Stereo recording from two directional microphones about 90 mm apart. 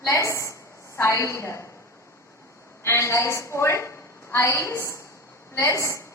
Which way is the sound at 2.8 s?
30° left (ahead or behind).